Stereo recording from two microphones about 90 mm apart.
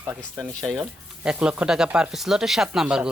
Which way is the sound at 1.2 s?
10° right (ahead or behind).